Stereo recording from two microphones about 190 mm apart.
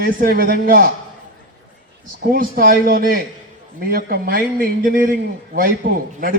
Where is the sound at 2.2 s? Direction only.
50° right (ahead or behind).